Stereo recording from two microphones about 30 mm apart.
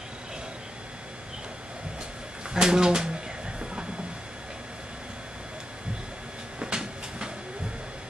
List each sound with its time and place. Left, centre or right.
2.5 s speech: right
6.6 s train: right